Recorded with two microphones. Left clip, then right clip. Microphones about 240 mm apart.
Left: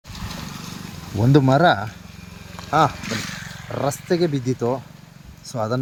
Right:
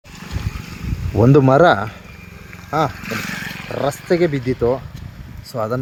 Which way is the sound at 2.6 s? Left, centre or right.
Centre.